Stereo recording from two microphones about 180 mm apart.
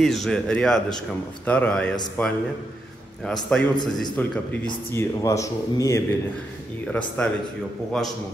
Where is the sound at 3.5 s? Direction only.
5° left (ahead or behind).